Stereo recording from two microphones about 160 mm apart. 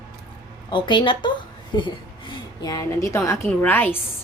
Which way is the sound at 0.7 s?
30° left (ahead or behind).